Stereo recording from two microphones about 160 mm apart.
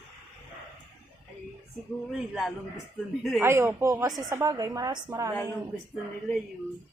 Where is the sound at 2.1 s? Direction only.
Centre (ahead or behind).